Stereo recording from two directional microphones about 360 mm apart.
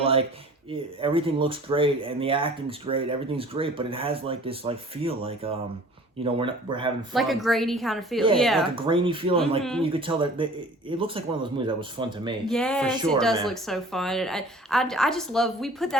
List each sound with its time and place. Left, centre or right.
0.0 s a sound: centre
0.7 s speech: centre
7.1 s a woman's voice: centre
8.7 s speech: centre
12.5 s a woman's voice: centre